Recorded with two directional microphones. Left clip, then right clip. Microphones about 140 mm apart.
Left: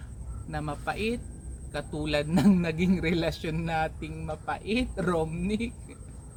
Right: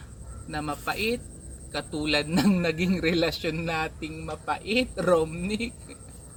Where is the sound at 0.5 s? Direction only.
20° left (ahead or behind).